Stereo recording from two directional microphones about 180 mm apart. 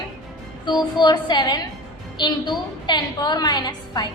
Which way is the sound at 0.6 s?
25° left (ahead or behind).